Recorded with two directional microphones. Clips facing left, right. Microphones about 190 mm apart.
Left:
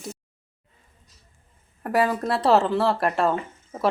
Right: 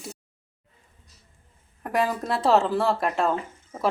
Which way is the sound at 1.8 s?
5° left (ahead or behind).